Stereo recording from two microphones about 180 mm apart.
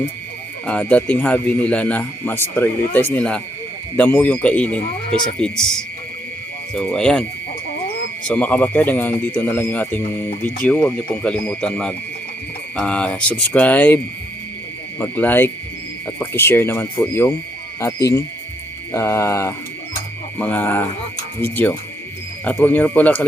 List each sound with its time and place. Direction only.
0.6 s speech: 5° left (ahead or behind)
8.3 s speech: 10° left (ahead or behind)